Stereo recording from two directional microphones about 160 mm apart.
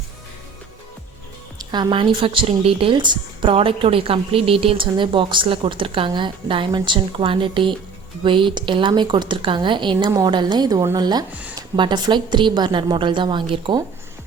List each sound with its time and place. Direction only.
1.5 s a woman's voice: 25° right (ahead or behind)